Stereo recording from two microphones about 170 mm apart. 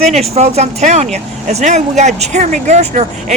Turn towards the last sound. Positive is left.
turn(degrees=-45)  # may be behind; listen again after turning